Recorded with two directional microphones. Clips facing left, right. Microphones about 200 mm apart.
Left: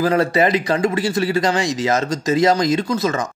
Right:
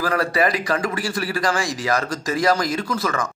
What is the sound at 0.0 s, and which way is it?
Speech, 25° left (ahead or behind).